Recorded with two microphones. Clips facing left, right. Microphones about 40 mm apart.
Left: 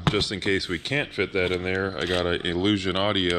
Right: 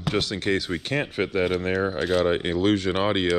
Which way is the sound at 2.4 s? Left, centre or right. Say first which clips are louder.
Right 2 dB; left.